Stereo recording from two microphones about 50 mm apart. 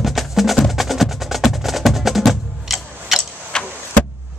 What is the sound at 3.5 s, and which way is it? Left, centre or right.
Vehicle, centre.